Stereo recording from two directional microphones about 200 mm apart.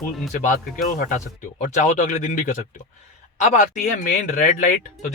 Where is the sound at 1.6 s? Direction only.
40° left (ahead or behind).